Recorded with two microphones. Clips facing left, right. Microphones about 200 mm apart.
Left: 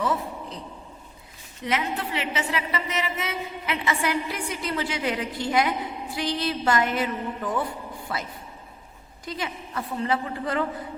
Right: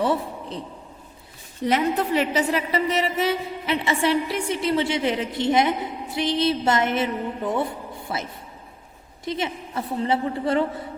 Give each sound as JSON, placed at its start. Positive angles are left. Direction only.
{"t": 0.0, "sound": "a man's voice", "side_deg": -30}
{"t": 1.6, "sound": "a woman's voice", "side_deg": -40}
{"t": 9.2, "sound": "a woman's voice", "side_deg": -25}